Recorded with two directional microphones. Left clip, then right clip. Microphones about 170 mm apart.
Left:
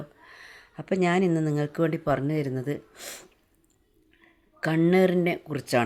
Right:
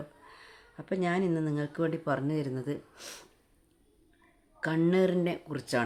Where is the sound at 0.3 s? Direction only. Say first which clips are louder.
Left 5 dB; 20° left (ahead or behind).